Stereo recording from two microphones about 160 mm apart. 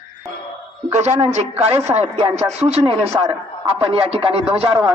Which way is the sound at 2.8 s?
20° right (ahead or behind).